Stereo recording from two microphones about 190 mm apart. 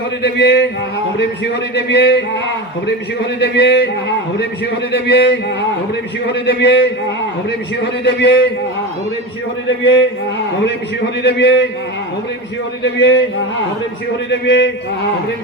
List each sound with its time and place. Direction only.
0.2 s a man's voice: 65° left (ahead or behind)
1.7 s a man's voice: 65° left (ahead or behind)
3.4 s a man's voice: 65° left (ahead or behind)
4.9 s a man's voice: 60° left (ahead or behind)
8.0 s a man's voice: 65° left (ahead or behind)
10.6 s a man's voice: 60° left (ahead or behind)
12.8 s a man's voice: 70° left (ahead or behind)
14.3 s a man's voice: 70° left (ahead or behind)